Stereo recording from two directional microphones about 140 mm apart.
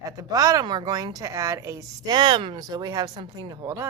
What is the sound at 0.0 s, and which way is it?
Speech, 25° right (ahead or behind).